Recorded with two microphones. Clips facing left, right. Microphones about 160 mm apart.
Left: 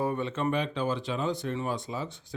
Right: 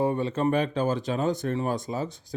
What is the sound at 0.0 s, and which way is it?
Speech, 30° right (ahead or behind).